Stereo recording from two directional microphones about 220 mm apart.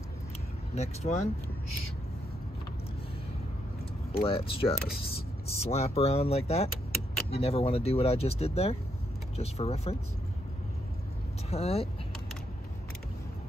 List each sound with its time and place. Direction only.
0.7 s speech: 30° left (ahead or behind)
4.1 s speech: 25° left (ahead or behind)
11.5 s speech: 25° left (ahead or behind)